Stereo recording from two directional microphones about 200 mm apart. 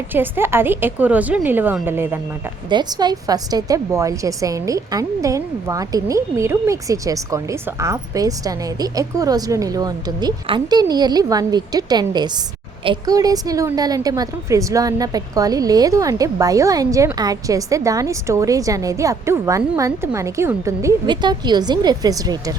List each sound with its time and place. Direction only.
0.1 s a woman's voice: 10° right (ahead or behind)
2.6 s a woman's voice: 20° right (ahead or behind)